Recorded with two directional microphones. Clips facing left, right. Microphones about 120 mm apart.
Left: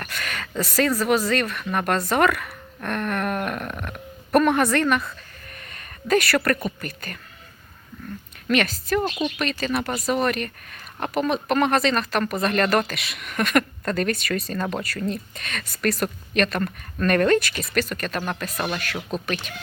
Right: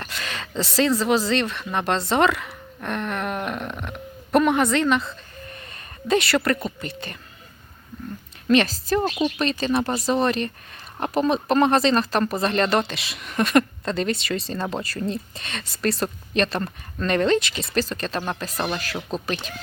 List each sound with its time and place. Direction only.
0.0 s a woman's voice: 25° right (ahead or behind)
8.4 s speech: 30° right (ahead or behind)